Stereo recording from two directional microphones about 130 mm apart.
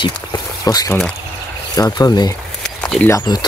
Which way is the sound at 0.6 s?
25° left (ahead or behind).